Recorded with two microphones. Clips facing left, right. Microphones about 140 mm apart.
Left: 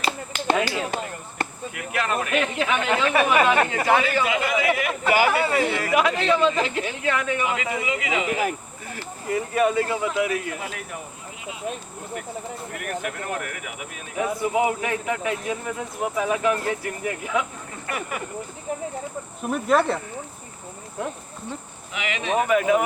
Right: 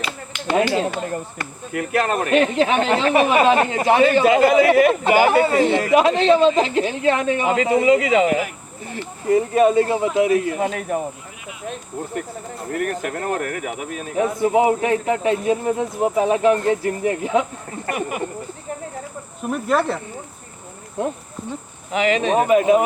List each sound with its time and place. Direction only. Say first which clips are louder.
0.3 s a sound: left 1 dB; 40° left (ahead or behind)
1.7 s speech: right 8 dB; 40° right (ahead or behind); by 4.0 s 25° right (ahead or behind)
4.1 s speech: right 9 dB; 40° right (ahead or behind)
9.3 s speech: right 7 dB; 30° right (ahead or behind)
12.7 s speech: right 8 dB; 40° right (ahead or behind); by 18.3 s 25° right (ahead or behind)
19.4 s speech: right 1 dB; centre (ahead or behind)
21.0 s speech: right 6 dB; 25° right (ahead or behind)
21.9 s speech: right 7 dB; 40° right (ahead or behind)
22.4 s speech: right 5 dB; 25° right (ahead or behind)